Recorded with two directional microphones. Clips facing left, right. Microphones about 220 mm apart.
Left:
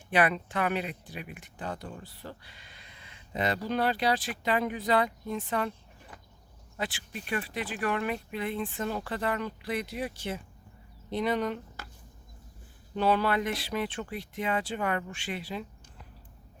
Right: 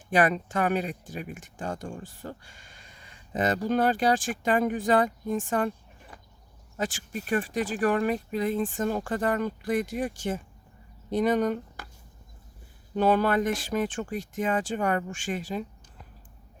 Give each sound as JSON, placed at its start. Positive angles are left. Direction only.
{"t": 0.1, "sound": "speech", "side_deg": -45}
{"t": 6.7, "sound": "speech", "side_deg": -45}
{"t": 13.0, "sound": "speech", "side_deg": -45}